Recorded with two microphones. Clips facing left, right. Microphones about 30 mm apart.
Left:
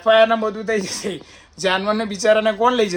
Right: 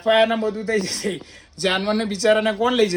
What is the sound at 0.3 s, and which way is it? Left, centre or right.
Speech, left.